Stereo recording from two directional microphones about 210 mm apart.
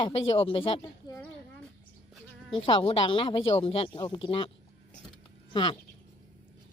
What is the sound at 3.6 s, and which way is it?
Speech, 25° left (ahead or behind).